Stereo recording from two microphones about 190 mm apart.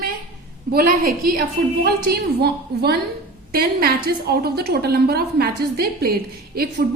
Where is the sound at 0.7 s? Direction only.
50° right (ahead or behind).